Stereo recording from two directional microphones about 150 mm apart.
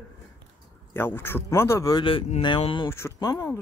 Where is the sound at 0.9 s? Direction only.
15° left (ahead or behind).